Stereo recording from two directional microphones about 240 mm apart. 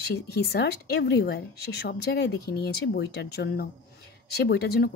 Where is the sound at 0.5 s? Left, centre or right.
Left.